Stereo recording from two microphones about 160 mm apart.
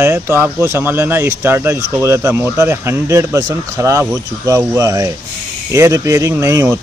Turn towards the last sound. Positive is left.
turn(degrees=-15)  # may be behind; listen again after turning